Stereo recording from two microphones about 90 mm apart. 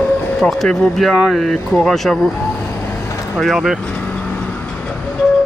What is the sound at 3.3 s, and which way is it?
Speech, centre (ahead or behind).